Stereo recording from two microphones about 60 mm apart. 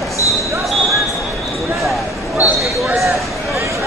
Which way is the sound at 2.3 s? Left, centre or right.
Right.